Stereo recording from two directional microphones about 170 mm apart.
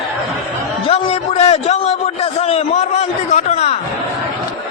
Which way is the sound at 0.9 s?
35° left (ahead or behind).